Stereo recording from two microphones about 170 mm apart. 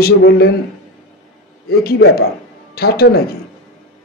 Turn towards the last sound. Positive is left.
turn(degrees=65)  # may be behind; listen again after turning